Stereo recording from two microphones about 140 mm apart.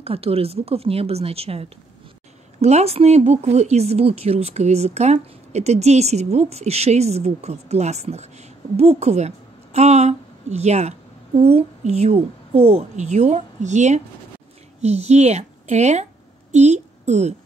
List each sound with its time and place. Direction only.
0.0 s a woman's voice: 45° right (ahead or behind)